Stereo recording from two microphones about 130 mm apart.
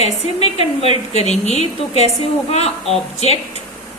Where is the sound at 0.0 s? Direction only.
55° left (ahead or behind).